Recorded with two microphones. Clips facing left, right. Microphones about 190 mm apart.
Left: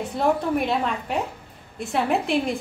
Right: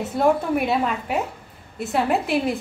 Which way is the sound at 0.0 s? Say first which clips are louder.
Right 3 dB; 5° right (ahead or behind).